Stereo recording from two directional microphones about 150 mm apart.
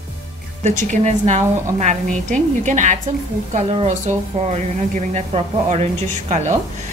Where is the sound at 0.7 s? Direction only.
50° right (ahead or behind).